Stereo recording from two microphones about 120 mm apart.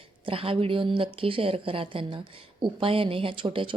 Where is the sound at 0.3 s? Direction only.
50° right (ahead or behind).